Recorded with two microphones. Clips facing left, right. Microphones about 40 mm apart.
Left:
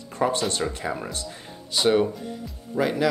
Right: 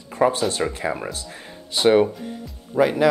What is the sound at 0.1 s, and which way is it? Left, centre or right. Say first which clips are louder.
Speech: right 4 dB; centre.